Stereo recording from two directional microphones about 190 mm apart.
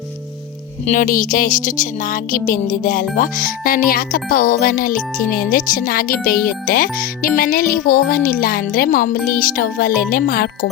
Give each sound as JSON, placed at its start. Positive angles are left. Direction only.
{"t": 0.9, "sound": "speech", "side_deg": 45}